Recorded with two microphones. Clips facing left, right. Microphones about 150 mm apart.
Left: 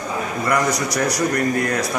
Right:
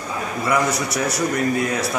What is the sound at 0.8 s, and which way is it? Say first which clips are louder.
Speech: left 2 dB; 5° right (ahead or behind).